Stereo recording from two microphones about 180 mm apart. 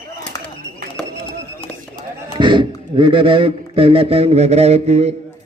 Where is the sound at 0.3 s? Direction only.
20° left (ahead or behind).